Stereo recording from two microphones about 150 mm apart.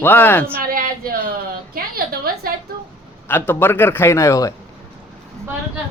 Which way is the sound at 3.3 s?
15° left (ahead or behind).